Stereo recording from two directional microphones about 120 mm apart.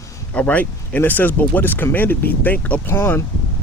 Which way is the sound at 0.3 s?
15° left (ahead or behind).